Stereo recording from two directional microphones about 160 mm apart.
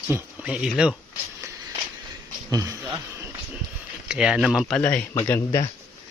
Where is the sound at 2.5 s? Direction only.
20° right (ahead or behind).